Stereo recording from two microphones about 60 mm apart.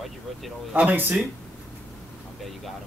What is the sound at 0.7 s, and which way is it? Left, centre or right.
Speech, right.